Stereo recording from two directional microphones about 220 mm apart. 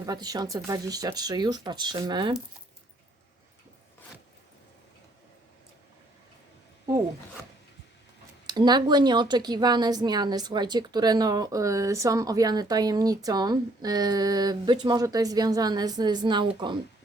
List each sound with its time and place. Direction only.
0.0 s a woman's voice: 15° right (ahead or behind)
8.4 s a woman's voice: 20° right (ahead or behind)